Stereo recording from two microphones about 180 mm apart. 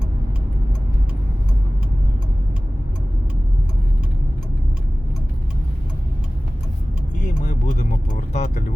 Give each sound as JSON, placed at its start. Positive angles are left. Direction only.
{"t": 7.2, "sound": "vehicle", "side_deg": 45}